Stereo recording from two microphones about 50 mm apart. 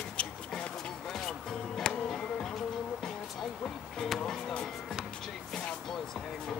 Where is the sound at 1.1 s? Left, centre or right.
Centre.